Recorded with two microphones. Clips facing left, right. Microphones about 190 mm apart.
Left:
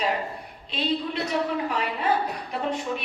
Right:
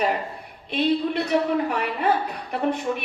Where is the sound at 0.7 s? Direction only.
60° right (ahead or behind).